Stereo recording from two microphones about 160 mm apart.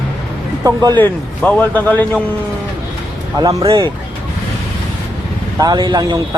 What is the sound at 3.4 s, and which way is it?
Speech, 20° right (ahead or behind).